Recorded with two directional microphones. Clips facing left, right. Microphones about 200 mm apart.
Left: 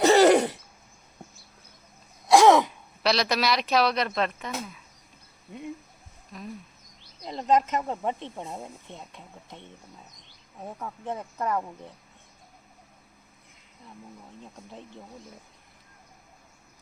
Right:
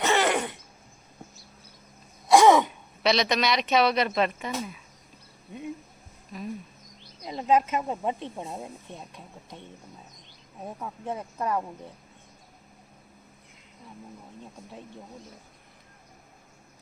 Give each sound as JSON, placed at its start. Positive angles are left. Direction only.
{"t": 0.0, "sound": "throat clearing", "side_deg": 35}
{"t": 2.2, "sound": "speech", "side_deg": 0}
{"t": 6.3, "sound": "speech", "side_deg": 0}
{"t": 10.6, "sound": "speech", "side_deg": -10}